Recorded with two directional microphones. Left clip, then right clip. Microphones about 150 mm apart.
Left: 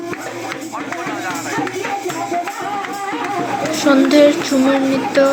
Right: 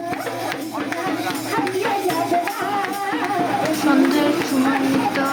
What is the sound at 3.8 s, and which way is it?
Child singing, 40° left (ahead or behind).